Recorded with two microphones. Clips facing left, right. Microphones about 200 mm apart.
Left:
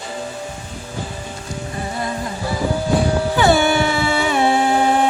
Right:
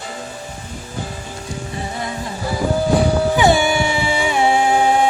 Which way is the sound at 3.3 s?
15° right (ahead or behind).